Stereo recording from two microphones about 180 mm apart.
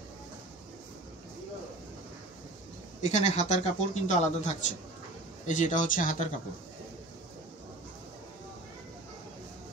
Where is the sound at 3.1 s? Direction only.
40° left (ahead or behind).